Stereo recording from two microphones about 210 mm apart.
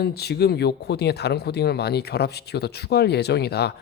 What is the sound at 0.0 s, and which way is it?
Speech, 50° left (ahead or behind).